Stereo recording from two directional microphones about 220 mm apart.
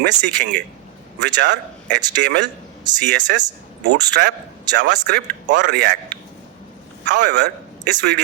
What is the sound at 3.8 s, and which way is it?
A man's voice, 50° right (ahead or behind).